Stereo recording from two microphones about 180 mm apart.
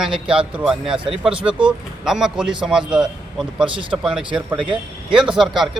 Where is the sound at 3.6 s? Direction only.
30° right (ahead or behind).